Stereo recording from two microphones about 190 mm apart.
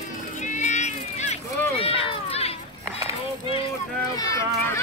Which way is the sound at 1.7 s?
30° left (ahead or behind).